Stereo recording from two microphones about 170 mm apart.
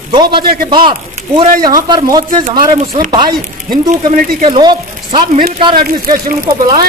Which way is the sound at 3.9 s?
45° right (ahead or behind).